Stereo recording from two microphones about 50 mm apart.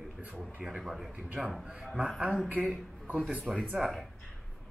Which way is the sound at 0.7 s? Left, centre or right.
Centre.